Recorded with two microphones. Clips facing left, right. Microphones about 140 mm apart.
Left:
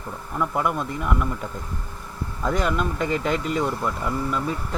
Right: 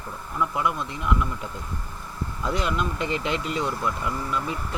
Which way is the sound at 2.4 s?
45° left (ahead or behind).